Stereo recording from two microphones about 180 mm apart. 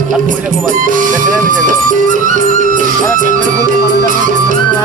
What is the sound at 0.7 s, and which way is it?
Speech, 50° right (ahead or behind).